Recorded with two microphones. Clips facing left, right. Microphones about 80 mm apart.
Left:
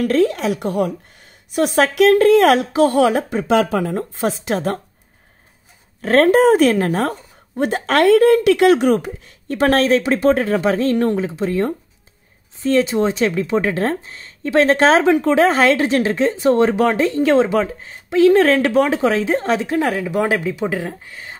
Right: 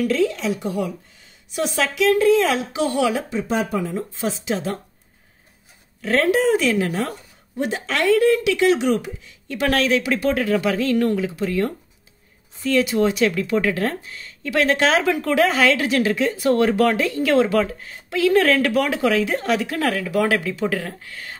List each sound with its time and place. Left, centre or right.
0.0 s speech: left
3.4 s speech: left
3.8 s speech: left
5.9 s speech: left